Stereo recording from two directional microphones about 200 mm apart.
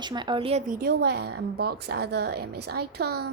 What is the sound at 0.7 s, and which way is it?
A woman's voice, 50° right (ahead or behind).